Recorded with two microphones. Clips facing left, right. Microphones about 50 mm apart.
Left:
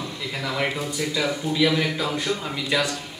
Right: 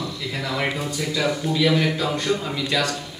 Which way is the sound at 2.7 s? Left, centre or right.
Centre.